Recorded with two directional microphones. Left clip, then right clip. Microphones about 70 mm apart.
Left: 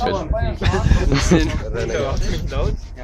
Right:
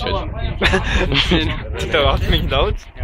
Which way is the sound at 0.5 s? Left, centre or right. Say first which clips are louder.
Right 11 dB; right.